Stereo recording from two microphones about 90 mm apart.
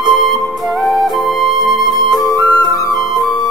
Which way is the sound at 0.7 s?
Centre (ahead or behind).